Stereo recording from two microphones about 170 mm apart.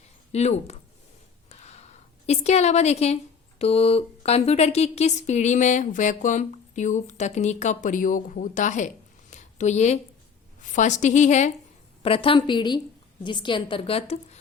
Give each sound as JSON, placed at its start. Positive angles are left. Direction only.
{"t": 0.3, "sound": "a woman's voice", "side_deg": 40}
{"t": 1.5, "sound": "a sound", "side_deg": 40}
{"t": 3.6, "sound": "a woman's voice", "side_deg": 35}
{"t": 9.3, "sound": "a sound", "side_deg": 45}
{"t": 10.6, "sound": "a woman's voice", "side_deg": 45}
{"t": 12.0, "sound": "a woman's voice", "side_deg": 30}